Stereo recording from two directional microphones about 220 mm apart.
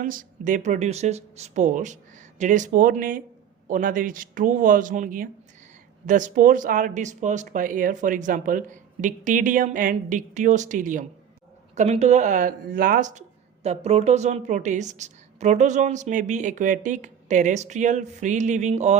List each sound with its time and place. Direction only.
0.0 s speech: 40° right (ahead or behind)